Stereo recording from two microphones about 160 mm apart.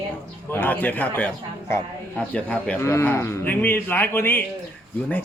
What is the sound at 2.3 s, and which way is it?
Speech, 5° left (ahead or behind).